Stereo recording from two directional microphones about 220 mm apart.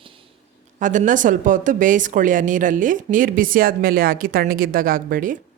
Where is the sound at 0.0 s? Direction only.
25° right (ahead or behind).